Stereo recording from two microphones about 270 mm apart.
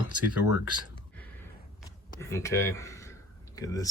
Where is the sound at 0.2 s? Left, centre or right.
Right.